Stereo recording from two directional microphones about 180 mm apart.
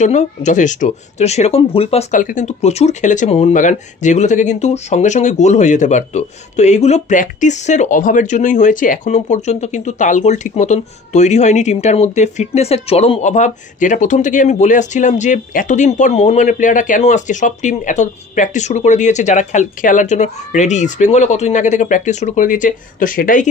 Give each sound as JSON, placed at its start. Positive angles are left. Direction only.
{"t": 0.0, "sound": "speech", "side_deg": 40}